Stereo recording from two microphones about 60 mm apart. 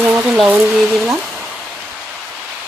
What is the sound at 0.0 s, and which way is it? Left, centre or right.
Rain, right.